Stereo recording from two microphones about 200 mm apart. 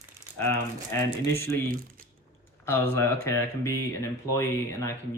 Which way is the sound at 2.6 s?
10° left (ahead or behind).